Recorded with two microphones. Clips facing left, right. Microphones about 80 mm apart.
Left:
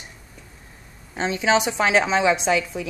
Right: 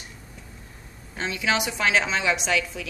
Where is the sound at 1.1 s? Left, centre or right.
Left.